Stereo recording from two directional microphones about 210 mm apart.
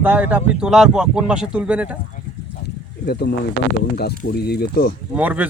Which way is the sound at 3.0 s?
50° left (ahead or behind).